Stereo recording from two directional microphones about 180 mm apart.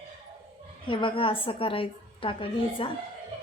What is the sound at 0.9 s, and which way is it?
A woman's voice, 30° left (ahead or behind).